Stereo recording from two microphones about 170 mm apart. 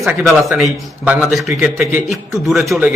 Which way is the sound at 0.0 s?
Centre (ahead or behind).